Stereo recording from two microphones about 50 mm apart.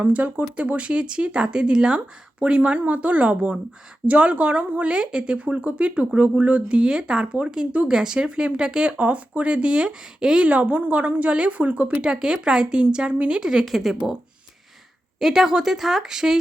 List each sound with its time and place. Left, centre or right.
0.0 s speech: right; by 10.4 s centre
10.4 s speech: right
12.1 s speech: centre
13.7 s speech: centre
15.2 s speech: centre